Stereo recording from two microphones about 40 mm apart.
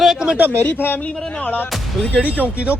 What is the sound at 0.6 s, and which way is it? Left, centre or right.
Speech, left.